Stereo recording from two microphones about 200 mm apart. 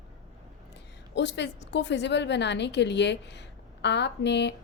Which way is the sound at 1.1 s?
60° left (ahead or behind).